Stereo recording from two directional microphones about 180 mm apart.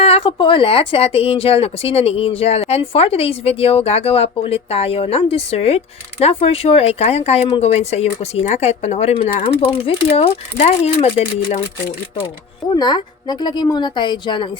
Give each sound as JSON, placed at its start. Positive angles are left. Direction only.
{"t": 0.0, "sound": "speech", "side_deg": 30}
{"t": 12.7, "sound": "a woman's voice", "side_deg": 25}